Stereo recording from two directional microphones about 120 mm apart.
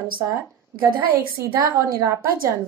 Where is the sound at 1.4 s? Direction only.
20° right (ahead or behind).